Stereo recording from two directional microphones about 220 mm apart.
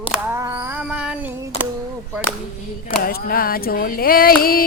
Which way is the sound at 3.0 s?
40° left (ahead or behind).